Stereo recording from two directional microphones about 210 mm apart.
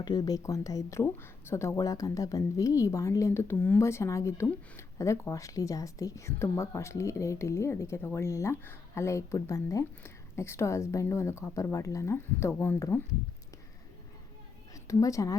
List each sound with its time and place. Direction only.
0.0 s speech: 20° left (ahead or behind)
14.7 s a woman's voice: 15° left (ahead or behind)